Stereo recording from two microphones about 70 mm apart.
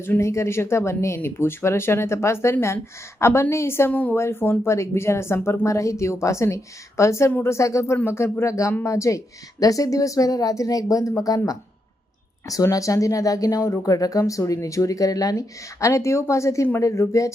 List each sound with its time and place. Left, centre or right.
0.2 s speech: left
12.7 s speech: left